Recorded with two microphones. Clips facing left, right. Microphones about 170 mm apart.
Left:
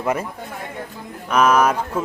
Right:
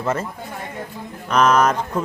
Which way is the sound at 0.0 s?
10° left (ahead or behind).